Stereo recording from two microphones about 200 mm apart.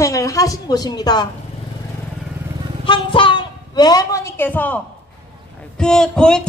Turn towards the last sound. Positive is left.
turn(degrees=5)  # may be behind; listen again after turning